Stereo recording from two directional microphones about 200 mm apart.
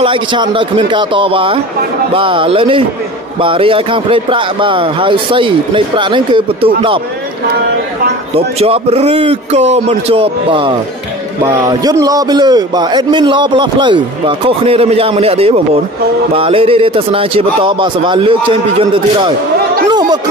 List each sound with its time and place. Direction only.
0.0 s a man's voice: 25° right (ahead or behind)
8.4 s a man's voice: 30° right (ahead or behind)
19.9 s chatter: 20° right (ahead or behind)